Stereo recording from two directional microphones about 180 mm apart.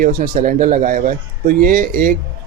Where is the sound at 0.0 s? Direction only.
50° right (ahead or behind).